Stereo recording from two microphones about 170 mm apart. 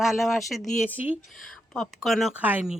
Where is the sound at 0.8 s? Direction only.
10° right (ahead or behind).